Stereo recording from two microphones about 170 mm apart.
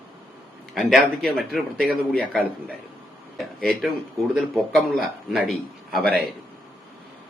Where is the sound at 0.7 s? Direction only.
Centre (ahead or behind).